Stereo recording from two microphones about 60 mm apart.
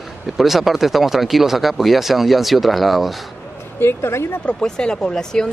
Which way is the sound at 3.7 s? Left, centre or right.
Left.